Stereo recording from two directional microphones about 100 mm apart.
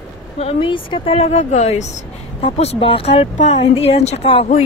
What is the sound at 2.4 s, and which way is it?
Speech, 80° left.